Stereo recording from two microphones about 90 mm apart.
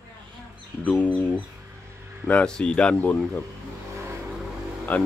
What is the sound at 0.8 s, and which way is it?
Speech, 15° left (ahead or behind).